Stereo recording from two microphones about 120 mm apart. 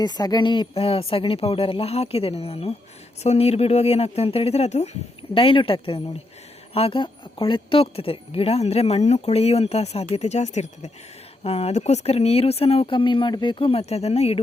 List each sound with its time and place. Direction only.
0.0 s a woman's voice: 35° left (ahead or behind); by 4.9 s 65° left (ahead or behind)
5.3 s a woman's voice: 50° left (ahead or behind); by 10.9 s 70° left (ahead or behind)
11.4 s speech: 55° left (ahead or behind)